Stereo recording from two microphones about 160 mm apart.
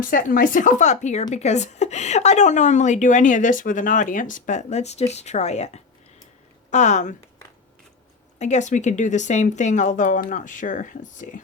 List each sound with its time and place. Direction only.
0.0 s a woman's voice: 60° left (ahead or behind)
8.4 s a woman's voice: 45° left (ahead or behind)